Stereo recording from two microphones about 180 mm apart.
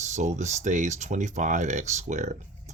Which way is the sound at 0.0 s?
40° right (ahead or behind).